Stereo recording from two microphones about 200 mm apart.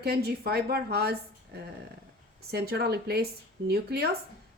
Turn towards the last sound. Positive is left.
turn(degrees=-55)  # may be behind; listen again after turning